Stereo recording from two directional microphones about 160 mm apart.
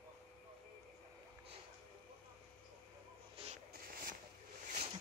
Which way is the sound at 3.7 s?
70° right (ahead or behind).